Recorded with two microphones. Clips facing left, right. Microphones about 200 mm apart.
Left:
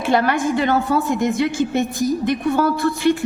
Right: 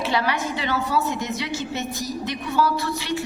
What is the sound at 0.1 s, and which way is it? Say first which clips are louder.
A woman's voice: left 10 dB; 50° left (ahead or behind).